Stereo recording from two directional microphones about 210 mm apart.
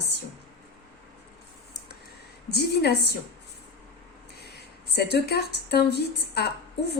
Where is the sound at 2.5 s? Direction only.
50° left (ahead or behind).